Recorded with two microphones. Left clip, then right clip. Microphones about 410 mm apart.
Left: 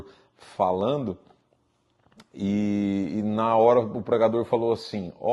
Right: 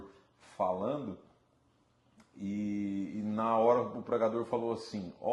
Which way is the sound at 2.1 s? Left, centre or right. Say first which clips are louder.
Left 12 dB; left.